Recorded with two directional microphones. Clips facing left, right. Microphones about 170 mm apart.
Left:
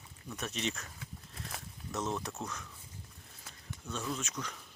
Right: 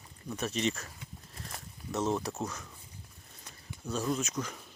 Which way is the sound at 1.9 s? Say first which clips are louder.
Right 5 dB; 30° right (ahead or behind).